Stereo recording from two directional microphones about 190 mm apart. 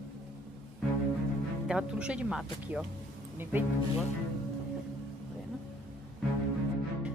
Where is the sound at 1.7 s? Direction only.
5° right (ahead or behind).